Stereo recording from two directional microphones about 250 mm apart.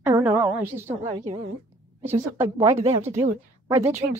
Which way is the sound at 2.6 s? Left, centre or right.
Right.